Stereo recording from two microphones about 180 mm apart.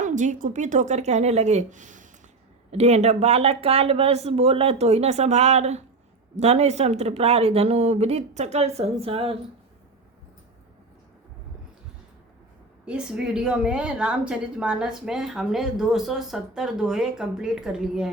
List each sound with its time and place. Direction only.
0.0 s a woman's voice: 45° right (ahead or behind)
12.8 s speech: 5° right (ahead or behind)